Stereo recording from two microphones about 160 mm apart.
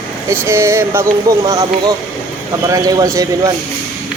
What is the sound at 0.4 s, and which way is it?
Speech, 15° right (ahead or behind).